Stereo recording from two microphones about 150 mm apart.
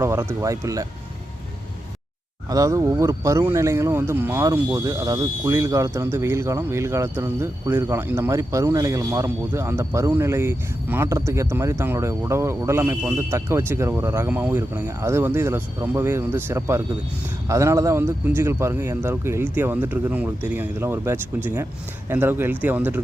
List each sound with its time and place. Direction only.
0.0 s speech: 20° right (ahead or behind)
2.5 s speech: 20° right (ahead or behind)